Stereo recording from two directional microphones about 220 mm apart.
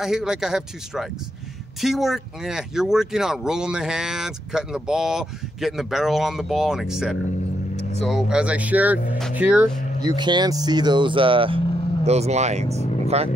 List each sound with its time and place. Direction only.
0.0 s speech: centre (ahead or behind)
10.0 s speech: 20° right (ahead or behind)